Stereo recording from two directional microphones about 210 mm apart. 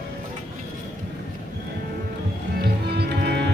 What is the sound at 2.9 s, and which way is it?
Music, 50° right (ahead or behind).